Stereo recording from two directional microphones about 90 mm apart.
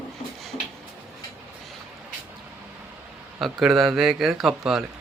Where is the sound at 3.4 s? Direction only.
Centre (ahead or behind).